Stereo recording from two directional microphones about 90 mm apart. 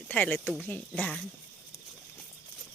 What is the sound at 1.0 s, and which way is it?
Speech, 5° left (ahead or behind).